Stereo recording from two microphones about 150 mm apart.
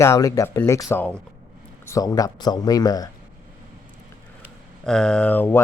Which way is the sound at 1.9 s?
25° left (ahead or behind).